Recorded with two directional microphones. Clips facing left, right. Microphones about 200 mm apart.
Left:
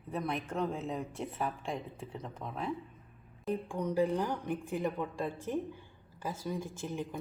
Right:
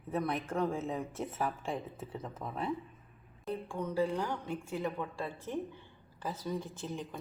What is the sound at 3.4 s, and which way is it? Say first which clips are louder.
A woman's voice: left 3 dB; 15° left (ahead or behind).